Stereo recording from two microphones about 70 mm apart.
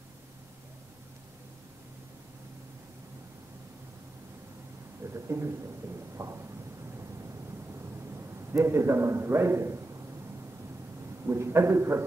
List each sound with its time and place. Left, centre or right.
5.1 s a sound: right
6.1 s thunder: right
8.5 s a man's voice: right
11.2 s a man's voice: right